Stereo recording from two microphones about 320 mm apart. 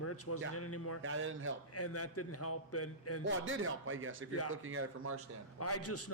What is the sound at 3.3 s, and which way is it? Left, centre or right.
A man's voice, right.